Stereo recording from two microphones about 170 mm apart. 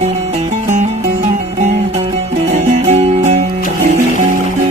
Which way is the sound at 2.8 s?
40° right (ahead or behind).